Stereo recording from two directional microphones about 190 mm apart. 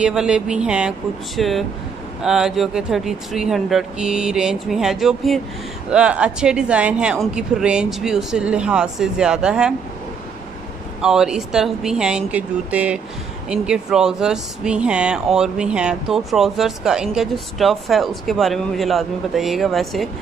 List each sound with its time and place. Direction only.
0.0 s speech: 5° right (ahead or behind)
11.0 s speech: 5° right (ahead or behind)